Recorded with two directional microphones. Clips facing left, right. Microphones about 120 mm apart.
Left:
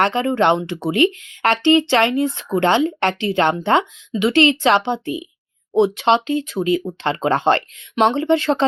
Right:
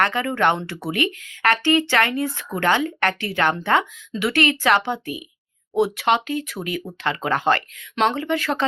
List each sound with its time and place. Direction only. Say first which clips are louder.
0.0 s speech: left 4 dB; 25° left (ahead or behind)